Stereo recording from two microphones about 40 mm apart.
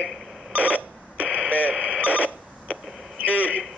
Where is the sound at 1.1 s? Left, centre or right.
Right.